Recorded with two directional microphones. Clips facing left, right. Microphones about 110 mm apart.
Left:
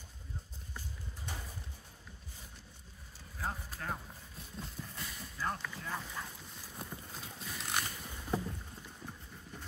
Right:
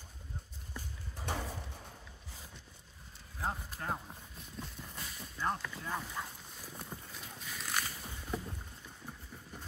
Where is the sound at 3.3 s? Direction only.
20° right (ahead or behind).